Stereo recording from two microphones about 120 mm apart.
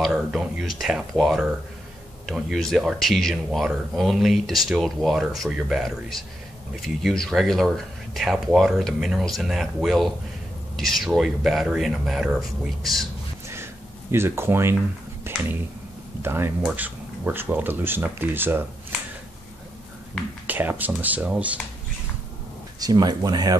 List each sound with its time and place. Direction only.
0.0 s speech: 5° right (ahead or behind)
14.1 s speech: 20° right (ahead or behind)
15.3 s a sound: 20° right (ahead or behind)
16.2 s speech: 20° right (ahead or behind)
20.4 s speech: 15° right (ahead or behind)
22.8 s speech: 35° right (ahead or behind)